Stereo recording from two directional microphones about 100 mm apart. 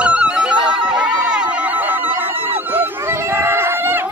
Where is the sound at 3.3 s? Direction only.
25° right (ahead or behind).